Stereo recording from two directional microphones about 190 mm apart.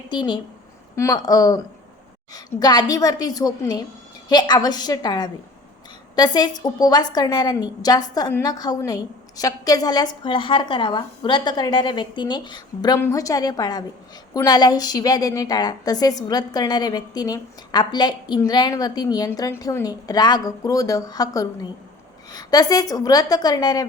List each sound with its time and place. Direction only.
0.1 s a woman's voice: 25° left (ahead or behind)